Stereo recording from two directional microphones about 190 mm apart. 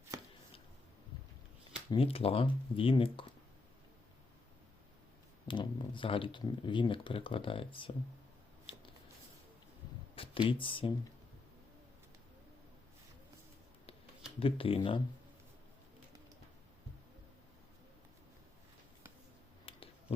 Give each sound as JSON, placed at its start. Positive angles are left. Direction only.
{"t": 1.9, "sound": "speech", "side_deg": 30}
{"t": 5.5, "sound": "speech", "side_deg": 25}
{"t": 8.7, "sound": "shuffling cards", "side_deg": 25}
{"t": 10.2, "sound": "speech", "side_deg": 25}
{"t": 14.3, "sound": "speech", "side_deg": 30}
{"t": 19.6, "sound": "a sound", "side_deg": 30}